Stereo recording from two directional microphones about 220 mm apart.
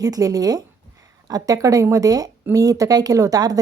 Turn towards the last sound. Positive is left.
turn(degrees=-15)  # may be behind; listen again after turning